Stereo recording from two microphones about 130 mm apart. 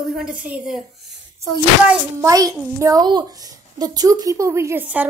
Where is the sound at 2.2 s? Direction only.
25° right (ahead or behind); by 5.1 s 10° right (ahead or behind).